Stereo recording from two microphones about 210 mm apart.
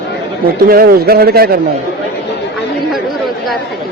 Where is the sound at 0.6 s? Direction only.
45° right (ahead or behind).